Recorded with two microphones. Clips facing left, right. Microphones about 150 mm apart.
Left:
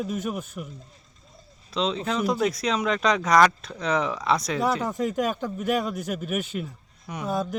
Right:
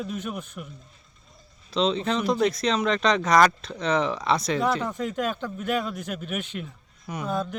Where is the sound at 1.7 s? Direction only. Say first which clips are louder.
Right 2 dB; centre (ahead or behind).